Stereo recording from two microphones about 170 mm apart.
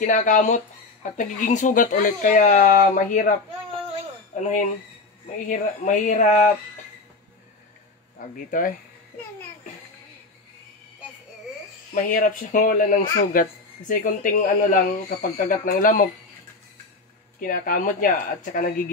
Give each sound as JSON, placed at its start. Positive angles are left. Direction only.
{"t": 0.0, "sound": "speech", "side_deg": 50}
{"t": 8.2, "sound": "speech", "side_deg": 55}
{"t": 11.9, "sound": "speech", "side_deg": 55}
{"t": 17.4, "sound": "speech", "side_deg": 55}